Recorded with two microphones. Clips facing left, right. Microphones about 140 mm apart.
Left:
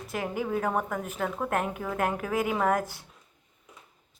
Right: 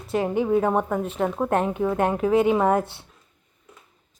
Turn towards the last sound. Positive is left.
turn(degrees=-25)  # may be behind; listen again after turning